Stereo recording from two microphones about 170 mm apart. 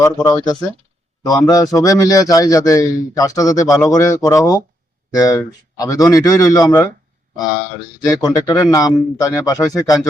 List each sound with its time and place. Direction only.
0.0 s a man's voice: 20° left (ahead or behind)
8.0 s a man's voice: 20° left (ahead or behind)